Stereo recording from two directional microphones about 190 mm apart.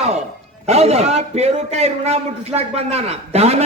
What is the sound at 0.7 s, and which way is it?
A man's voice, 35° right (ahead or behind).